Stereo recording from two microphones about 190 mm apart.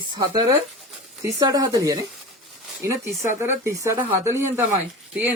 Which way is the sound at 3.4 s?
15° right (ahead or behind).